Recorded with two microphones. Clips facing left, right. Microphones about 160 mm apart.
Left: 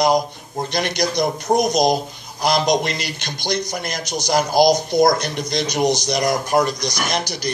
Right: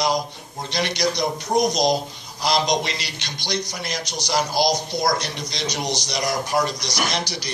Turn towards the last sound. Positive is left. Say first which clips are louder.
# left 2 dB
turn(degrees=50)  # may be behind; listen again after turning